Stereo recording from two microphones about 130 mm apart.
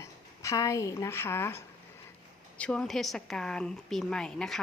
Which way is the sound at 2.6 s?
5° left (ahead or behind).